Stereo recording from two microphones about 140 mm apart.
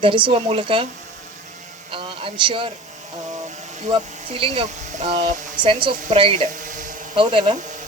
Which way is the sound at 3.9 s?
40° right (ahead or behind).